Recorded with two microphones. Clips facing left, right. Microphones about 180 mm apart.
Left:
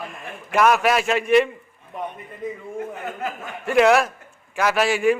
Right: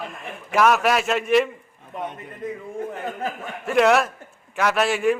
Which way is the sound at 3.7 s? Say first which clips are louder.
Left 1 dB; centre (ahead or behind).